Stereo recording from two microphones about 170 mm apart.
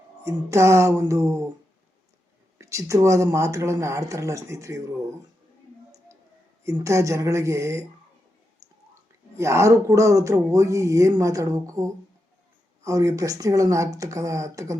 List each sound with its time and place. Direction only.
0.3 s speech: 15° right (ahead or behind)
2.6 s speech: 20° right (ahead or behind)
6.7 s speech: 20° right (ahead or behind)
9.3 s speech: 15° right (ahead or behind)